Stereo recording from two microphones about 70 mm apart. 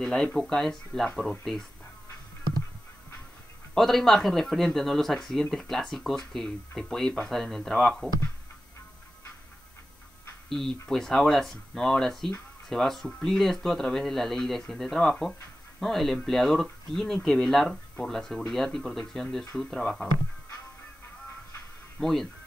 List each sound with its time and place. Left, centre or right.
0.0 s speech: centre
3.7 s speech: centre
10.5 s speech: centre
22.0 s speech: centre